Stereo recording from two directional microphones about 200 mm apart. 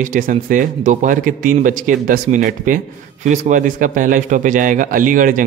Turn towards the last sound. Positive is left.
turn(degrees=-40)  # may be behind; listen again after turning